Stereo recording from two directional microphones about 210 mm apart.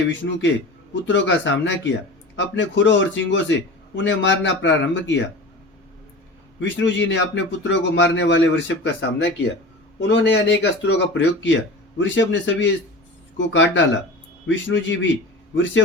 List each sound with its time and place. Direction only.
0.0 s speech: 60° left (ahead or behind)
6.6 s speech: 60° left (ahead or behind)